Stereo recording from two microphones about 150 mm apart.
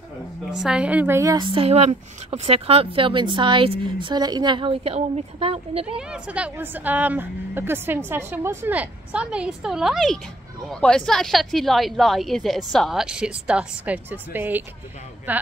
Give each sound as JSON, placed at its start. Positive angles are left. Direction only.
{"t": 0.6, "sound": "a woman's voice", "side_deg": -5}
{"t": 5.9, "sound": "a woman's voice", "side_deg": -5}